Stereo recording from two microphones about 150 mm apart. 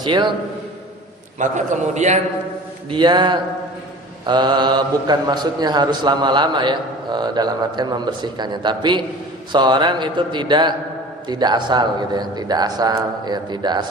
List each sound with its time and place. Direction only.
0.0 s a man's voice: 30° right (ahead or behind)
1.4 s a man's voice: 55° right (ahead or behind)
2.9 s a man's voice: 30° right (ahead or behind)